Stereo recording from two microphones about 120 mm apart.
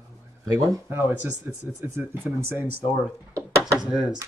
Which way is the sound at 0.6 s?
25° right (ahead or behind).